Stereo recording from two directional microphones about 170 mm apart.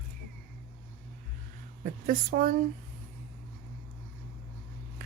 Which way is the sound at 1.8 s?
55° right (ahead or behind).